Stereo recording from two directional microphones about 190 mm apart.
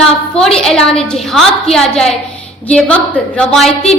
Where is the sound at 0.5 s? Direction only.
5° left (ahead or behind).